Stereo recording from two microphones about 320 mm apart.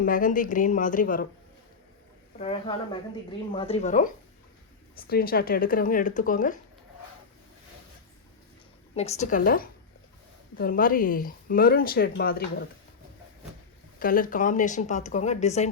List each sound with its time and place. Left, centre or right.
0.0 s speech: left
2.4 s speech: centre
9.0 s speech: left
14.0 s speech: left